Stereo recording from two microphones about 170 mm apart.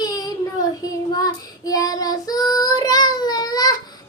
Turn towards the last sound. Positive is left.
turn(degrees=25)  # may be behind; listen again after turning